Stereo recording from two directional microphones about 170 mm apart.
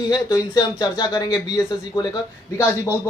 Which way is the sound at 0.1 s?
20° left (ahead or behind).